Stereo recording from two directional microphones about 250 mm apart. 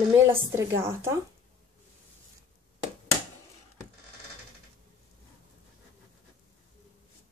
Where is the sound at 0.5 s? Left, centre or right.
Centre.